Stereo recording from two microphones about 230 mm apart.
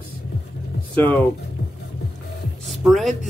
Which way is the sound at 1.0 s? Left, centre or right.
Centre.